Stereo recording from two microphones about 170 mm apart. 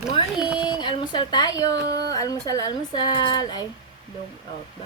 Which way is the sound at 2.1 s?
20° left (ahead or behind).